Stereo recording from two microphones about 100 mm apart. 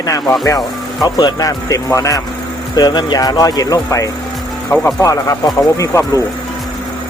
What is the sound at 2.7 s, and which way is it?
Speech, 45° left (ahead or behind).